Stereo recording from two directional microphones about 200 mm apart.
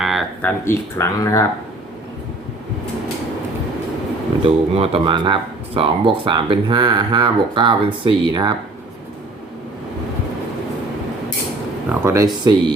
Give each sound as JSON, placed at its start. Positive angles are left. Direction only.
{"t": 0.0, "sound": "a sound", "side_deg": 0}
{"t": 0.6, "sound": "speech", "side_deg": 15}
{"t": 4.4, "sound": "speech", "side_deg": -30}
{"t": 11.9, "sound": "speech", "side_deg": -15}